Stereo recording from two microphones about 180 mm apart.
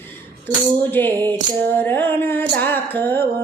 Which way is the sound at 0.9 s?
10° left (ahead or behind).